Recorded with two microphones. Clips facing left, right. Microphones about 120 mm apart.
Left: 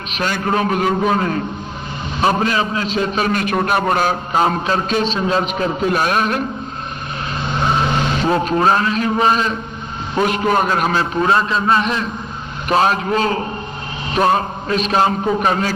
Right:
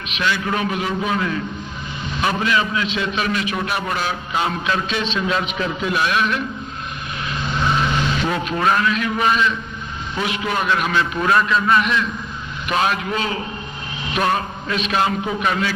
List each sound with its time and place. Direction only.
0.1 s a man's voice: 45° left (ahead or behind)
7.5 s a man's voice: 35° left (ahead or behind)